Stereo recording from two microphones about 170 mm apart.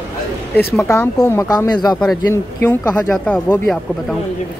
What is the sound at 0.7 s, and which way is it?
Speech, 15° left (ahead or behind).